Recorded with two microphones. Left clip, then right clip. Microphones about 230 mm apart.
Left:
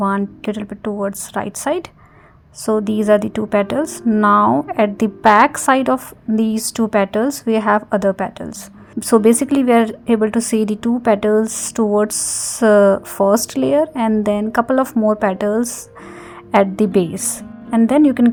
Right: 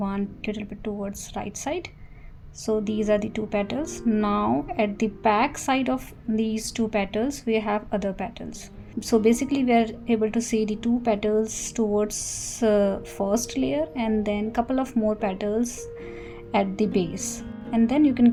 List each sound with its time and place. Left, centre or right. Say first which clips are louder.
0.0 s a woman's voice: left 11 dB; left